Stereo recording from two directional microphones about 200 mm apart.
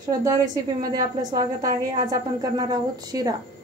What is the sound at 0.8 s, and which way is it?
Speech, 20° right (ahead or behind).